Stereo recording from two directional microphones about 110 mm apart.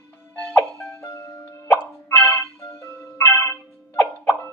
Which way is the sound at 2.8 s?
25° left (ahead or behind).